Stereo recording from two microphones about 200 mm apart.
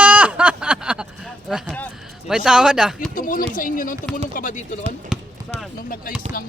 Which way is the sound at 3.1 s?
45° left (ahead or behind).